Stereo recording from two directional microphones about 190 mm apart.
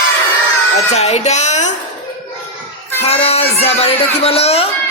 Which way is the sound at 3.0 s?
30° left (ahead or behind).